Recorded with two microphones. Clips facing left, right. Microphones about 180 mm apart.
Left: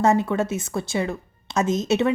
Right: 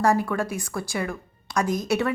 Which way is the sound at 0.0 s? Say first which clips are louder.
Left 2 dB; 20° left (ahead or behind).